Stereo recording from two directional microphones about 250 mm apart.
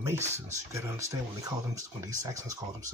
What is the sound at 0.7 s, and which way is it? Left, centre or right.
Speech, centre.